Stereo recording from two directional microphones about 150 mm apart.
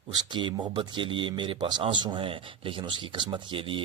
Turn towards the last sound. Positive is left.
turn(degrees=-35)  # may be behind; listen again after turning